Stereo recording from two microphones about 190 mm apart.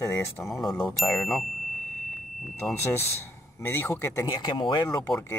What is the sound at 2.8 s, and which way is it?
Speech, 15° left (ahead or behind).